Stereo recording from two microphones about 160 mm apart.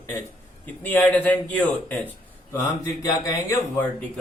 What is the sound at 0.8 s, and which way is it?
Speech, 10° left (ahead or behind).